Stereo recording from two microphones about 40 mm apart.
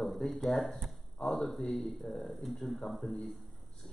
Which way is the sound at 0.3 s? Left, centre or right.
Centre.